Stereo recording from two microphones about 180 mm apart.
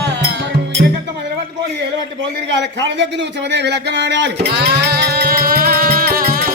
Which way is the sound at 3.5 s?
70° right (ahead or behind).